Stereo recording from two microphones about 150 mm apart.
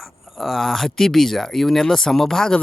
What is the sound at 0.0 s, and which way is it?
Speech, centre (ahead or behind).